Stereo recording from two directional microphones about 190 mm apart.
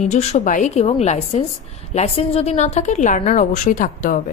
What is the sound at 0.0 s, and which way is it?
A woman's voice, 35° left (ahead or behind).